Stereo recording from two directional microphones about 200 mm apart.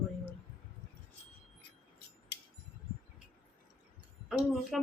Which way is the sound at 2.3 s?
55° left (ahead or behind).